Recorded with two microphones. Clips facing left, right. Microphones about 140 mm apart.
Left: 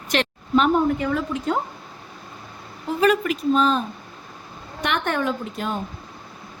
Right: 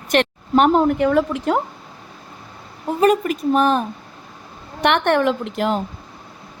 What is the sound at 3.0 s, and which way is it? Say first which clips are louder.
Speech: right 3 dB; 45° right (ahead or behind).